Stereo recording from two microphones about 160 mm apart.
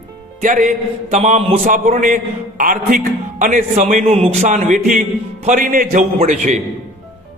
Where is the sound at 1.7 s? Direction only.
55° right (ahead or behind).